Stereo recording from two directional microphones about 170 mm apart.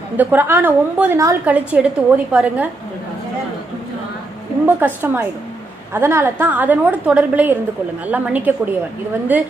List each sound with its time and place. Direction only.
0.2 s a woman's voice: 10° right (ahead or behind)
4.6 s a woman's voice: 10° right (ahead or behind)